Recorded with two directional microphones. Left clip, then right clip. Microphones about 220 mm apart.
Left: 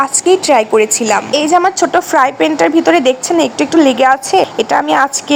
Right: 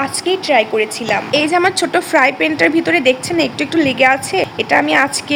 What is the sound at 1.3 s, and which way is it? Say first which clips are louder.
Speech: left 1 dB; 15° left (ahead or behind).